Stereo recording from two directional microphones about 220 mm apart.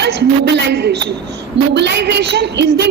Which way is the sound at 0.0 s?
50° right (ahead or behind).